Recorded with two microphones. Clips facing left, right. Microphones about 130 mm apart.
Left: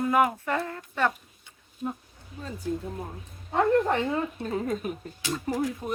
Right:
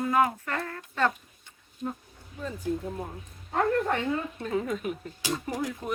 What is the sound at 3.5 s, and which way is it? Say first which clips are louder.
Speech: left 3 dB; 25° left (ahead or behind).